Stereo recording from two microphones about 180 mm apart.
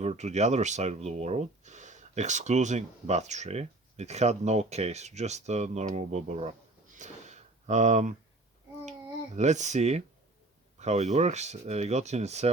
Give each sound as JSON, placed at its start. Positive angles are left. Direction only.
{"t": 0.0, "sound": "speech", "side_deg": -40}
{"t": 6.9, "sound": "a sound", "side_deg": -40}
{"t": 8.9, "sound": "speech", "side_deg": -40}